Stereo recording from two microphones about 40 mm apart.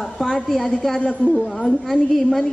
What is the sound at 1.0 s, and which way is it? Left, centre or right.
Speech, left.